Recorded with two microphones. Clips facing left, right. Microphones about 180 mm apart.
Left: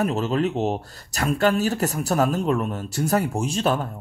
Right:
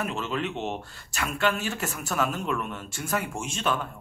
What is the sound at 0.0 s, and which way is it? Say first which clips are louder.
Speech: left 8 dB; 40° left (ahead or behind).